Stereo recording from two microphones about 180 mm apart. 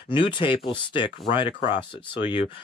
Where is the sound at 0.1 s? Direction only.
25° left (ahead or behind).